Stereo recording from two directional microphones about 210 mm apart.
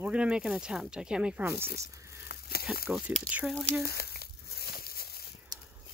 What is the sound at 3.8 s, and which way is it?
Crumpling, 50° left (ahead or behind).